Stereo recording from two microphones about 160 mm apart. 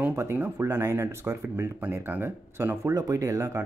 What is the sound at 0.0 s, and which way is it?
Speech, 15° right (ahead or behind).